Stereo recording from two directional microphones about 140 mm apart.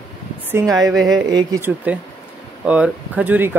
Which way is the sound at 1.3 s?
30° right (ahead or behind).